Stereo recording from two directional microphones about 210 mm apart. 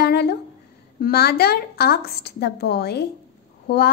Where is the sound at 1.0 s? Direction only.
50° left (ahead or behind).